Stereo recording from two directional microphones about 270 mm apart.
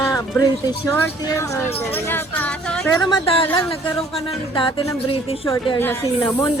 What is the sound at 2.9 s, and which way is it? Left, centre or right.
Speech, centre.